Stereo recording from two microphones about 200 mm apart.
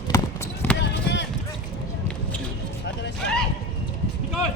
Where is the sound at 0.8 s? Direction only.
60° left (ahead or behind).